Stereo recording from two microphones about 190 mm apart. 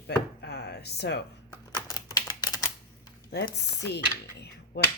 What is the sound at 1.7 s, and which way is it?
Typing, 20° left (ahead or behind).